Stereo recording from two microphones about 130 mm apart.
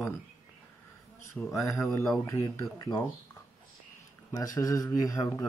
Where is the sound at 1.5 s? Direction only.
25° left (ahead or behind).